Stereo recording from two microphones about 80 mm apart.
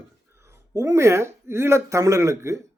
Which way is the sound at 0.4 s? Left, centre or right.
Right.